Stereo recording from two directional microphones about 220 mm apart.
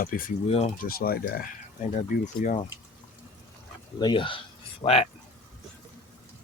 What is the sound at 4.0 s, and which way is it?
Speech, 20° left (ahead or behind).